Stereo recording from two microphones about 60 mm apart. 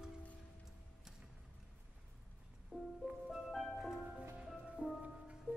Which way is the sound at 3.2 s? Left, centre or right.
Centre.